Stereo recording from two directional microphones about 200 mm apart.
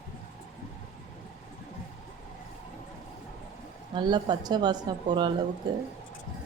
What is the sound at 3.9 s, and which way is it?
Speech, 20° right (ahead or behind).